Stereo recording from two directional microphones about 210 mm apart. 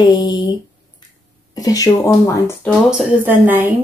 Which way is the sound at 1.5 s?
15° left (ahead or behind).